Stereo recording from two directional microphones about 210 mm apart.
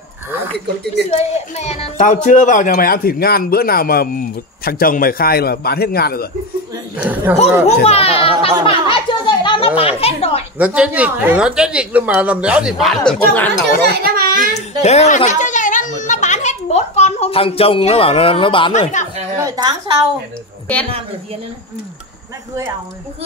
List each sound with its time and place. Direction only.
1.1 s speech: 30° left (ahead or behind); by 6.2 s 50° left (ahead or behind)
7.0 s speech: 5° right (ahead or behind)
7.6 s speech: 30° left (ahead or behind)
8.6 s a sound: 25° left (ahead or behind)
9.8 s speech: 30° left (ahead or behind)
10.6 s speech: 5° right (ahead or behind)
13.8 s a sound: 45° right (ahead or behind)
14.8 s a sound: 30° left (ahead or behind)
18.7 s speech: 35° left (ahead or behind)
19.4 s a woman's voice: 15° right (ahead or behind)